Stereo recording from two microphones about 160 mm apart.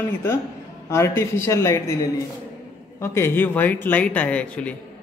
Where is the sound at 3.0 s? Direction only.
15° left (ahead or behind).